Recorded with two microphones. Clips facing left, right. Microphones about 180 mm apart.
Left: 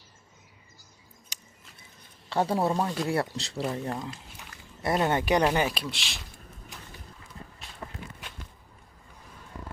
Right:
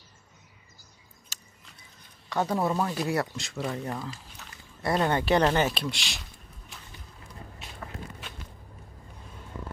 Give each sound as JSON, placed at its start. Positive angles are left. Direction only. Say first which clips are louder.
{"t": 1.3, "sound": "a sound", "louder": "right 2 dB", "side_deg": 15}
{"t": 2.3, "sound": "speech", "louder": "left 1 dB", "side_deg": 30}
{"t": 3.6, "sound": "speech", "louder": "left 1 dB", "side_deg": 5}
{"t": 4.8, "sound": "speech", "louder": "even", "side_deg": 20}